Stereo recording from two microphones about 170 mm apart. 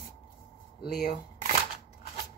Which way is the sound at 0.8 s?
70° left (ahead or behind).